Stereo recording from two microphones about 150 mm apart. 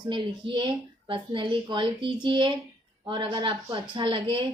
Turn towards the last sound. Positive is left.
turn(degrees=-35)  # may be behind; listen again after turning